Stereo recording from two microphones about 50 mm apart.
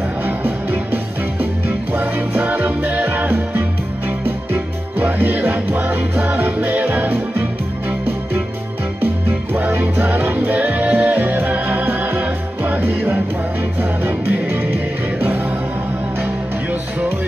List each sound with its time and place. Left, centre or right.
0.2 s music: right
9.6 s music: right